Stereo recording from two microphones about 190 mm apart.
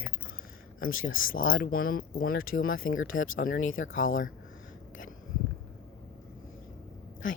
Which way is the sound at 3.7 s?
90° left.